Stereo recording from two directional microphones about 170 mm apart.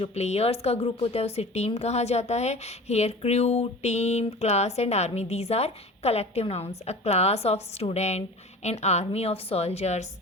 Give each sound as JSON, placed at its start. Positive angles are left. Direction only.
{"t": 0.0, "sound": "speech", "side_deg": 40}